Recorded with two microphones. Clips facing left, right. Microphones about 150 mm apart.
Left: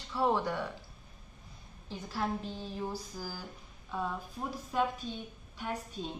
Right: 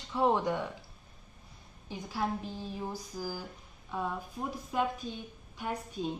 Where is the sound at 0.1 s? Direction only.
20° right (ahead or behind).